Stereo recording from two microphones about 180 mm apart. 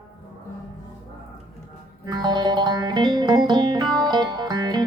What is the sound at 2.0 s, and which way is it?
Music, 25° right (ahead or behind).